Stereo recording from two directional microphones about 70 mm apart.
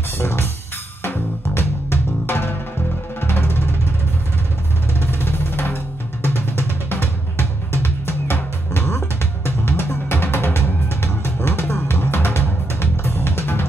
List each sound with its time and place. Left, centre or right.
0.2 s music: left
5.0 s music: left